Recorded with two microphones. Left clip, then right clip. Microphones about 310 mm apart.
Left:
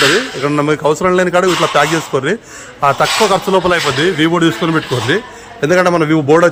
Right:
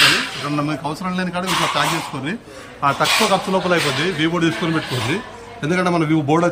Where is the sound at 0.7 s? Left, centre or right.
Centre.